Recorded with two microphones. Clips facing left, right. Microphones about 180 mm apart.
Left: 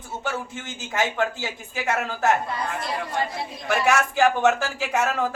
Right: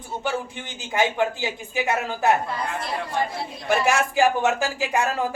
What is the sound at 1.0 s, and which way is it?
Speech, 15° right (ahead or behind).